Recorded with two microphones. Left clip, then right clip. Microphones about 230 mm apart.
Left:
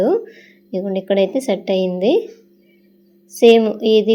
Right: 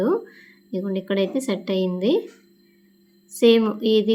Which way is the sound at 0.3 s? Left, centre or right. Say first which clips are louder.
Left 5 dB; centre.